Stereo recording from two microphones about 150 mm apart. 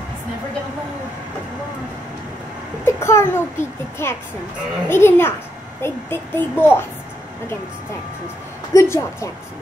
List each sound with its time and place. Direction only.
2.8 s a woman's voice: 20° left (ahead or behind)
8.7 s a woman's voice: 20° left (ahead or behind)